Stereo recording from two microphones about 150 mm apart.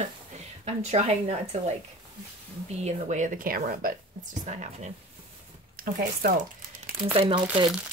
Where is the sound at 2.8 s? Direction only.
55° right (ahead or behind); by 3.9 s 75° right (ahead or behind).